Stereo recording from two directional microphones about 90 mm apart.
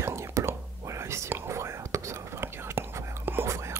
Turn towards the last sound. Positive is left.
turn(degrees=-30)  # may be behind; listen again after turning